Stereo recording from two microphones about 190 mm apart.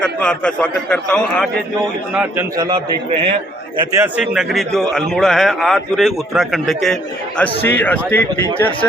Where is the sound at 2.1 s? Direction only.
5° right (ahead or behind).